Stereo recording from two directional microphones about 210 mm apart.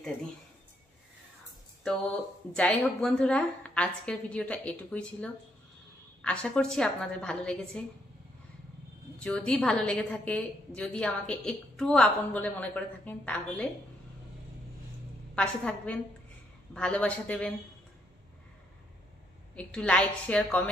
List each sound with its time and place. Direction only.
2.5 s a woman's voice: 5° left (ahead or behind)
9.2 s a woman's voice: 5° left (ahead or behind)
15.3 s a woman's voice: 5° left (ahead or behind)
19.5 s a woman's voice: 5° left (ahead or behind)